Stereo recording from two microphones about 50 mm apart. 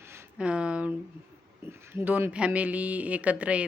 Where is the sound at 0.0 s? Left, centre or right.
Right.